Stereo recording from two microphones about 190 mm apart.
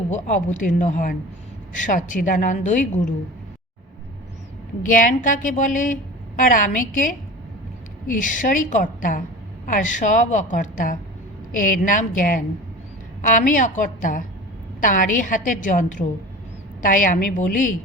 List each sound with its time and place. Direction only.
0.1 s a woman's voice: 40° left (ahead or behind)
4.8 s a woman's voice: 45° left (ahead or behind)
8.2 s a woman's voice: 45° left (ahead or behind)